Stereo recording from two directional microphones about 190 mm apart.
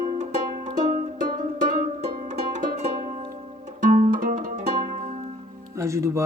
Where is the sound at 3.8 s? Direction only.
45° right (ahead or behind).